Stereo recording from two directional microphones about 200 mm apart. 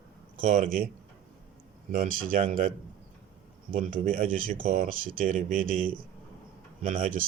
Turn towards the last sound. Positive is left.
turn(degrees=-40)  # may be behind; listen again after turning